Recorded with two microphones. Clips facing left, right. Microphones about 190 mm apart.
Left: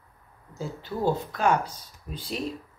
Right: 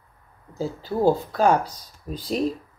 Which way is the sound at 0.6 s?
35° right (ahead or behind).